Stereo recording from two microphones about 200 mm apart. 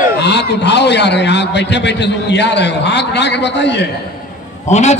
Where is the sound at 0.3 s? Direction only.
60° left (ahead or behind).